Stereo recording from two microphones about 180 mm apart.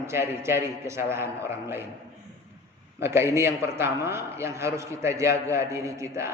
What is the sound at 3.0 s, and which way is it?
A man's voice, 15° right (ahead or behind).